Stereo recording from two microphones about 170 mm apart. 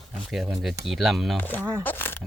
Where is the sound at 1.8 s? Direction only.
10° left (ahead or behind).